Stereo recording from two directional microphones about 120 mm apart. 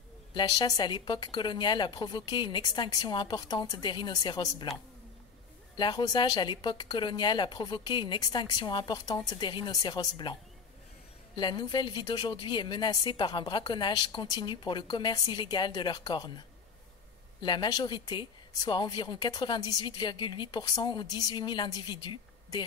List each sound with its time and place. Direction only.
0.3 s speech: 35° left (ahead or behind)
5.8 s speech: 35° left (ahead or behind)
11.3 s speech: 40° left (ahead or behind)